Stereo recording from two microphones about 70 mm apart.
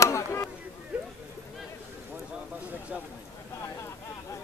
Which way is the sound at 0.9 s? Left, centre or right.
Centre.